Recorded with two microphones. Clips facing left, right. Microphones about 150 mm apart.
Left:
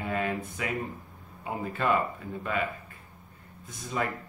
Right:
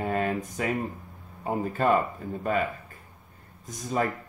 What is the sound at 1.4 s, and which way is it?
Speech, 40° right (ahead or behind).